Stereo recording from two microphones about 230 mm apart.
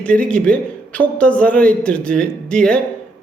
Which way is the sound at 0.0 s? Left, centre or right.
Centre.